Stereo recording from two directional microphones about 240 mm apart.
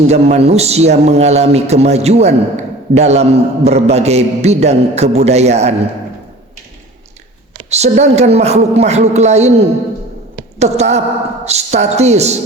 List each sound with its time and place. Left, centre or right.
0.1 s a man's voice: right
7.7 s a man's voice: right
10.6 s a man's voice: right